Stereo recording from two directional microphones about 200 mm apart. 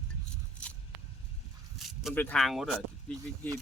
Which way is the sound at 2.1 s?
5° left (ahead or behind).